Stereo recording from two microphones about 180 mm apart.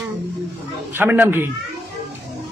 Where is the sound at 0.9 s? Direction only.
10° right (ahead or behind).